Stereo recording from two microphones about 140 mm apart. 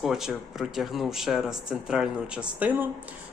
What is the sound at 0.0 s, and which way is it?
Speech, 5° right (ahead or behind).